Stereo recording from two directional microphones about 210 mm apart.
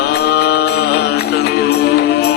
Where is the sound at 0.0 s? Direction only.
50° left (ahead or behind).